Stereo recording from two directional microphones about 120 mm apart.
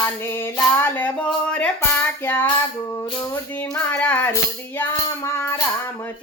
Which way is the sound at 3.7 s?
15° left (ahead or behind).